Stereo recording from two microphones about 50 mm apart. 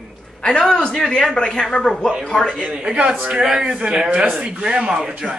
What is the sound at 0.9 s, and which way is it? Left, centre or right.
Speech, centre.